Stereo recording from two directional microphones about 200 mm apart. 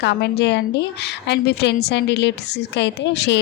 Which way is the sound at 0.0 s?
55° left (ahead or behind).